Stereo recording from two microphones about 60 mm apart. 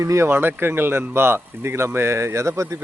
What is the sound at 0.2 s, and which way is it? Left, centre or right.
Speech, right.